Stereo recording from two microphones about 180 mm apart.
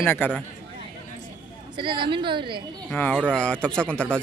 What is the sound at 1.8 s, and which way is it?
Speech, 25° right (ahead or behind).